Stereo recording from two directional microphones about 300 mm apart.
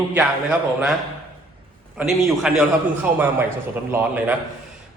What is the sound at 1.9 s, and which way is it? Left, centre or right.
A man's voice, centre.